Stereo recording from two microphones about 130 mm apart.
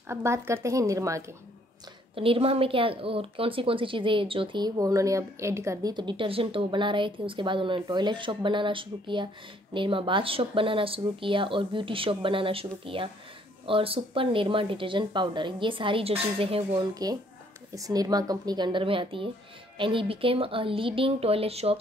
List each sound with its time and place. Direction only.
0.1 s speech: 20° right (ahead or behind)
2.1 s a woman's voice: 45° right (ahead or behind)
16.9 s a woman's voice: 30° right (ahead or behind); by 21.7 s 50° right (ahead or behind)